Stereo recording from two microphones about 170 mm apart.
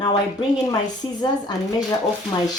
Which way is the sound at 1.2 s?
25° left (ahead or behind).